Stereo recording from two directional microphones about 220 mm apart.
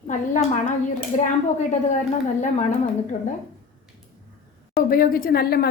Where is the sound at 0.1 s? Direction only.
35° left (ahead or behind).